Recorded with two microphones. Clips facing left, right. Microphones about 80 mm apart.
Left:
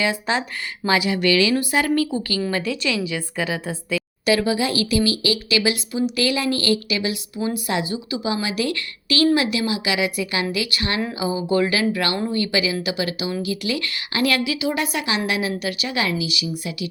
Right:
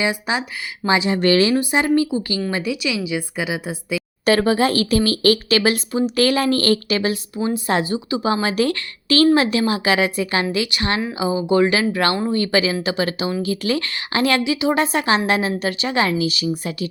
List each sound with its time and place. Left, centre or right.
0.0 s a woman's voice: centre; by 1.5 s right
1.5 s a woman's voice: right
4.3 s speech: right
7.3 s speech: right
7.7 s a woman's voice: right